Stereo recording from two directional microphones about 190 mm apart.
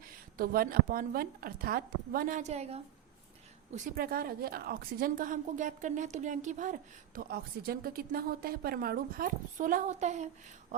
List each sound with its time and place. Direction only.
0.3 s a woman's voice: 50° right (ahead or behind); by 2.8 s 35° right (ahead or behind)
3.8 s a woman's voice: 50° right (ahead or behind)
7.2 s a woman's voice: 55° right (ahead or behind); by 10.2 s 35° right (ahead or behind)